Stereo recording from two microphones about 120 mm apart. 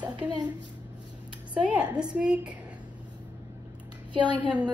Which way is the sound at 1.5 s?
10° right (ahead or behind).